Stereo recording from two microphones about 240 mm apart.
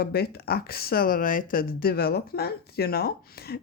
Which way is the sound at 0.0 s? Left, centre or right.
Left.